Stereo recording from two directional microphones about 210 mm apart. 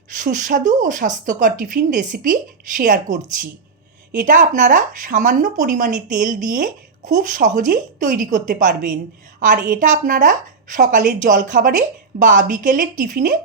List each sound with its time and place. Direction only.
0.2 s speech: 40° right (ahead or behind)